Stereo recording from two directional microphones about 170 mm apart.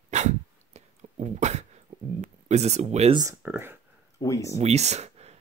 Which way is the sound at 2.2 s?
40° right (ahead or behind).